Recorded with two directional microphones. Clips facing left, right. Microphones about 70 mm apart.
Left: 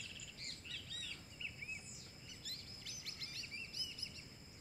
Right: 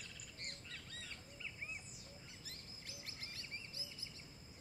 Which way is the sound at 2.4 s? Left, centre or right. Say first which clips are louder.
Even; right.